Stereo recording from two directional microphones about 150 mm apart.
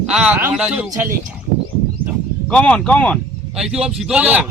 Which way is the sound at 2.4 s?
5° left (ahead or behind).